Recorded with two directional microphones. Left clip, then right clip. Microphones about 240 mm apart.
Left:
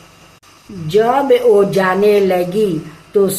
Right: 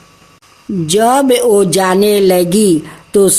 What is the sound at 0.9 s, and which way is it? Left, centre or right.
A woman's voice, right.